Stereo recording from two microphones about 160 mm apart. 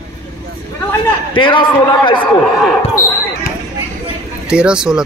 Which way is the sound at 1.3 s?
30° left (ahead or behind).